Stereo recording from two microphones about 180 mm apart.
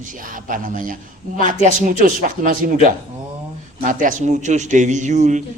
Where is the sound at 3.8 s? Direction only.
45° right (ahead or behind).